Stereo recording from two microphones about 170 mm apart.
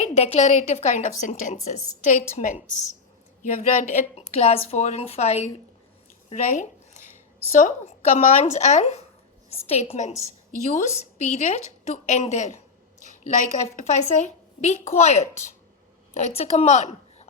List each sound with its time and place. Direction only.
0.0 s a woman's voice: 40° left (ahead or behind)
6.3 s a sound: 45° left (ahead or behind)
7.5 s a woman's voice: 45° left (ahead or behind)